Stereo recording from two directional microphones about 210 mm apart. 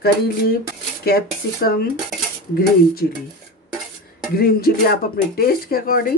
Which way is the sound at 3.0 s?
40° left (ahead or behind).